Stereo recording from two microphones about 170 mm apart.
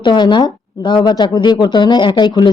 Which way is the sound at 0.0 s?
25° left (ahead or behind).